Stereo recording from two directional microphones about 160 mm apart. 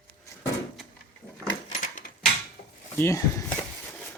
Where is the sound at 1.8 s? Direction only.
55° left (ahead or behind).